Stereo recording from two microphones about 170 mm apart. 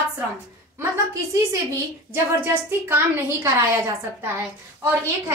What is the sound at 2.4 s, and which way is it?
A woman's voice, 15° right (ahead or behind).